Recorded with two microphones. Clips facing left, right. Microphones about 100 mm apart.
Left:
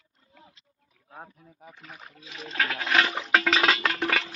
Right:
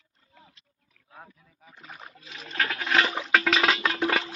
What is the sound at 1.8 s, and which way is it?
Rowboat, 5° right (ahead or behind).